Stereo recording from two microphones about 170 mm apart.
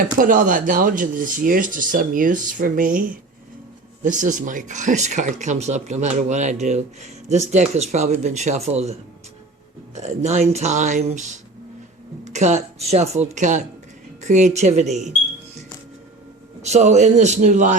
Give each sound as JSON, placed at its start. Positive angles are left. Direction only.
{"t": 0.2, "sound": "speech", "side_deg": -50}
{"t": 16.6, "sound": "speech", "side_deg": -40}